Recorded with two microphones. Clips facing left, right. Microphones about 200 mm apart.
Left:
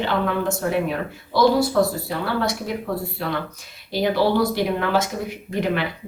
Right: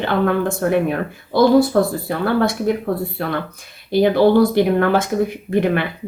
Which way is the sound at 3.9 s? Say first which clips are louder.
Right 7 dB; 55° right (ahead or behind).